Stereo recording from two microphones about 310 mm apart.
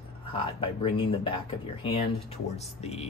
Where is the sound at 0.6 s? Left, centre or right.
Centre.